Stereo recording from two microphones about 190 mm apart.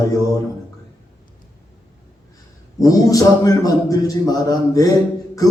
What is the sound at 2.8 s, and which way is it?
A man's voice, 20° left (ahead or behind).